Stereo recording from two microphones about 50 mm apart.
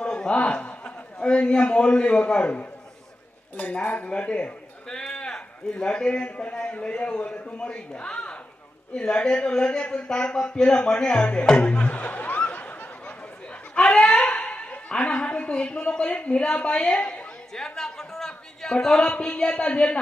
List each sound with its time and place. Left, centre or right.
0.0 s a man's voice: centre
13.7 s a woman's voice: centre
19.1 s speech: left